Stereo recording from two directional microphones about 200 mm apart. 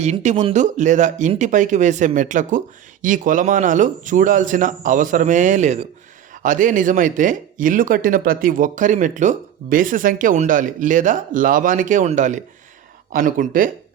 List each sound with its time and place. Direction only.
0.0 s speech: 35° right (ahead or behind)